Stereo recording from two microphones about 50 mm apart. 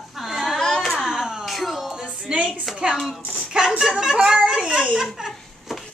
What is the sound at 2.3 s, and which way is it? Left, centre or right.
Speech, right.